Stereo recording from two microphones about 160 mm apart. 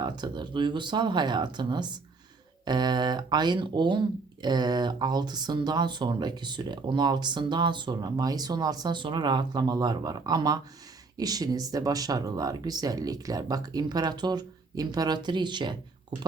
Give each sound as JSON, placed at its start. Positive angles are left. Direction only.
{"t": 0.0, "sound": "speech", "side_deg": -30}